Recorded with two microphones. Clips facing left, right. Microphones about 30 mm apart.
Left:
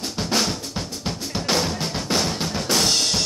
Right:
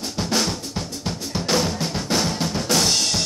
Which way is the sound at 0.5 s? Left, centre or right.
Centre.